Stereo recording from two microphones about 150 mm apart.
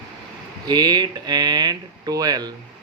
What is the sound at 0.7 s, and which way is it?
Speech, 25° right (ahead or behind).